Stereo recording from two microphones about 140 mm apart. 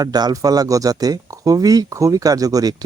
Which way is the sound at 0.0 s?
30° right (ahead or behind).